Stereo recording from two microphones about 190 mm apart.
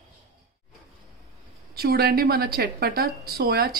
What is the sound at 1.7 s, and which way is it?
Speech, 55° right (ahead or behind).